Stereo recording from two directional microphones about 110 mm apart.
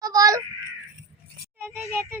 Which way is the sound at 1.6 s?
20° right (ahead or behind).